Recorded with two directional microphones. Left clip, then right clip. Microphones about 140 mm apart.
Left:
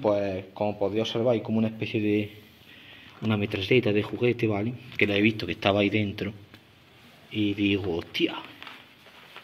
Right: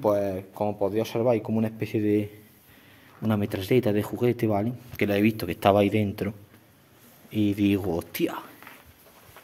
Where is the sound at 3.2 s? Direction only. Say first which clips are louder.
Even; 25° right (ahead or behind).